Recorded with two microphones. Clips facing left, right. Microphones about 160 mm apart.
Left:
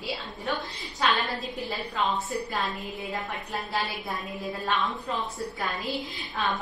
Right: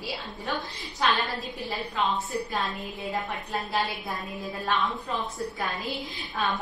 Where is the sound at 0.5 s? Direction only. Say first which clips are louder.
Even; centre (ahead or behind).